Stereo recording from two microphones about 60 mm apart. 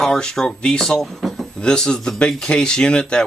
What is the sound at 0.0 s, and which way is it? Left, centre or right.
Speech, centre.